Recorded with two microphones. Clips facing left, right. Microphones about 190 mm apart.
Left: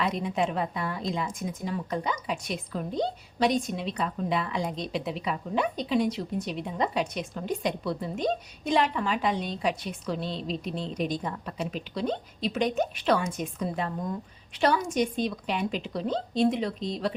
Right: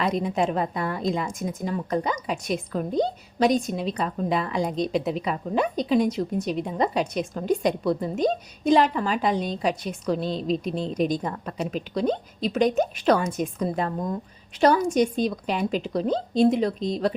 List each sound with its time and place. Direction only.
0.0 s a woman's voice: 40° right (ahead or behind)